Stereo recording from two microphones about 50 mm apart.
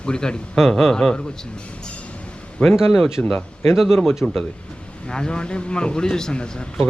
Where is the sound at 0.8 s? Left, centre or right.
Centre.